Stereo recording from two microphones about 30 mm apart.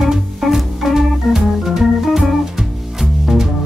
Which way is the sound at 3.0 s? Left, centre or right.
Centre.